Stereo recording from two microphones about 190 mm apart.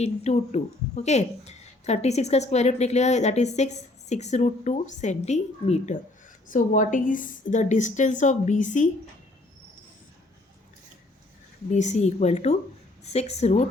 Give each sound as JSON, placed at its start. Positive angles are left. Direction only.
{"t": 0.0, "sound": "a woman's voice", "side_deg": 35}
{"t": 11.7, "sound": "a woman's voice", "side_deg": 40}